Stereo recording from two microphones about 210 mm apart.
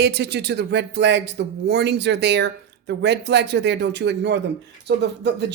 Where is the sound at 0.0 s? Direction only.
50° right (ahead or behind).